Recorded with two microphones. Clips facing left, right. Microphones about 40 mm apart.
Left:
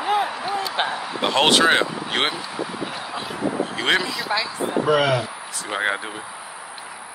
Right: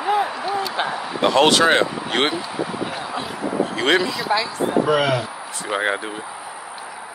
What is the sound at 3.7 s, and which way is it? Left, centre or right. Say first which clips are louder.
Speech: right 4 dB; centre.